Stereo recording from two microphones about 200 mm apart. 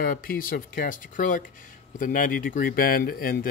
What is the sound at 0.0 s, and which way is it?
Speech, 45° left (ahead or behind).